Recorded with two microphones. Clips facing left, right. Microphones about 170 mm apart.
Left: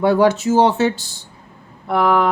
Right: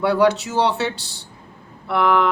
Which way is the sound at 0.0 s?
45° left (ahead or behind).